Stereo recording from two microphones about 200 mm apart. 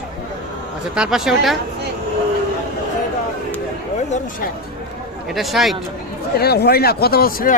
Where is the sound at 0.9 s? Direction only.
5° right (ahead or behind).